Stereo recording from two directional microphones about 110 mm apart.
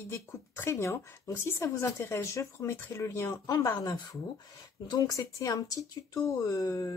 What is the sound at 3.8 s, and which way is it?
Speech, 35° left (ahead or behind).